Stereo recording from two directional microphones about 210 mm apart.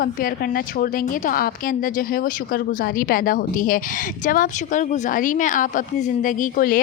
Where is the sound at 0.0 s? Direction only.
45° left (ahead or behind).